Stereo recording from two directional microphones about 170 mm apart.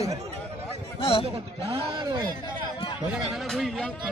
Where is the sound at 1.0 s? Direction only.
35° left (ahead or behind).